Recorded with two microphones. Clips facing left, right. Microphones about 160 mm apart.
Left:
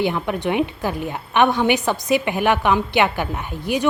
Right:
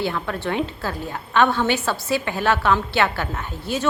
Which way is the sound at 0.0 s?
15° left (ahead or behind).